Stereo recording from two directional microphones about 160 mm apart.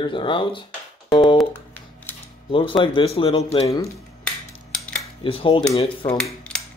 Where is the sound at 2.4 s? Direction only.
30° left (ahead or behind).